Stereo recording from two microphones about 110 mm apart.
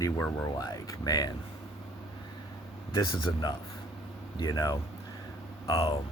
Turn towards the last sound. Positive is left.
turn(degrees=30)  # may be behind; listen again after turning